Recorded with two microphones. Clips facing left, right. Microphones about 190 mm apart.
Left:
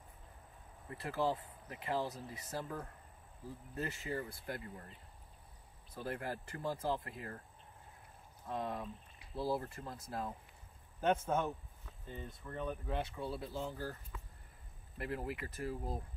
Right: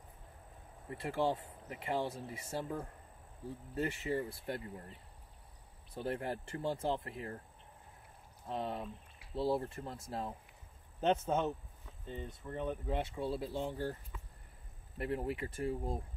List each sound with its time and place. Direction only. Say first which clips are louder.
0.9 s speech: right 2 dB; 25° right (ahead or behind)
5.9 s speech: right 3 dB; 25° right (ahead or behind)
8.5 s speech: right 1 dB; 25° right (ahead or behind)
15.0 s speech: right 4 dB; 25° right (ahead or behind)